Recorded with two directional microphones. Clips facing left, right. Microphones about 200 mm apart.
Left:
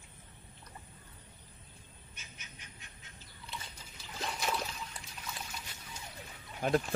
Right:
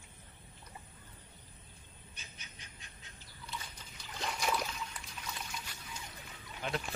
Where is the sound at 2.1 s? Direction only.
35° right (ahead or behind).